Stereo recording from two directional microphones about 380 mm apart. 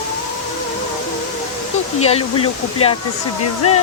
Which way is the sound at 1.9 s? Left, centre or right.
Centre.